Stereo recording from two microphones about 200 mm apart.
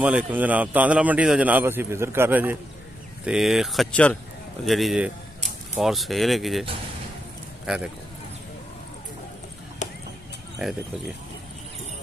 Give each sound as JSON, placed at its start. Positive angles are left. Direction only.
{"t": 0.0, "sound": "a man's voice", "side_deg": -5}
{"t": 7.6, "sound": "speech", "side_deg": -5}
{"t": 9.8, "sound": "a sound", "side_deg": 35}